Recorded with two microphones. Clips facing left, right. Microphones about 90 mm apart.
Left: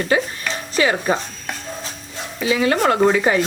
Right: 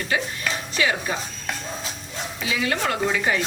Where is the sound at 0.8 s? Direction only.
40° left (ahead or behind).